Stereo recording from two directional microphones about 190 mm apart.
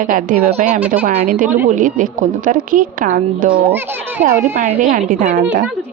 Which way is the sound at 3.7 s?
10° right (ahead or behind).